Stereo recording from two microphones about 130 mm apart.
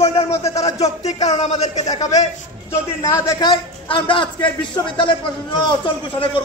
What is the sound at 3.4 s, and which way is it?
Speech, 35° left (ahead or behind).